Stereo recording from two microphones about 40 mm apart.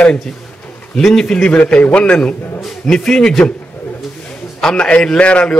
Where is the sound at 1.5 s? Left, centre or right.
Left.